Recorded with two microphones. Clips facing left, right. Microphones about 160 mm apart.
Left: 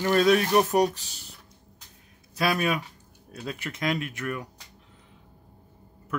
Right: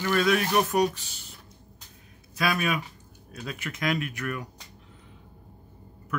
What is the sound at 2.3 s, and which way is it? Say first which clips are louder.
Speech: left 2 dB; 35° left (ahead or behind).